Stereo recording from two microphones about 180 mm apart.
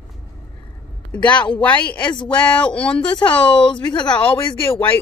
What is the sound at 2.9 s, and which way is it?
Speech, 25° left (ahead or behind).